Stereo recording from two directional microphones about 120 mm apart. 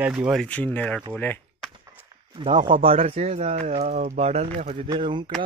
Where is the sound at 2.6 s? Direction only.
50° right (ahead or behind).